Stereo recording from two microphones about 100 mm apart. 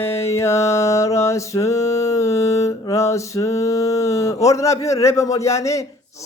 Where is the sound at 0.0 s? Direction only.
25° left (ahead or behind).